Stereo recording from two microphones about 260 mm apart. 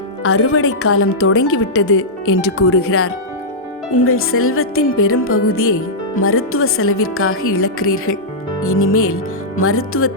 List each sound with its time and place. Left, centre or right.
0.2 s speech: left